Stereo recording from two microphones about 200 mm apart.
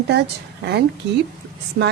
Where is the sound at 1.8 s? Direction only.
60° right (ahead or behind).